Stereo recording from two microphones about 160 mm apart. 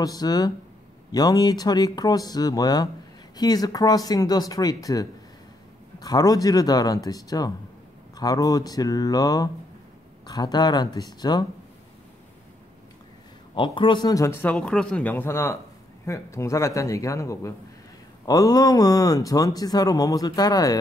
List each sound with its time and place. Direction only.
0.0 s speech: 25° left (ahead or behind)
13.6 s speech: 30° left (ahead or behind)